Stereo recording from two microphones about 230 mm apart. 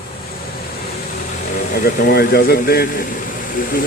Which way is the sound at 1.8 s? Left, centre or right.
Left.